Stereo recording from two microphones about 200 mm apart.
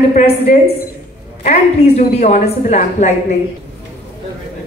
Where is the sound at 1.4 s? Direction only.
35° left (ahead or behind).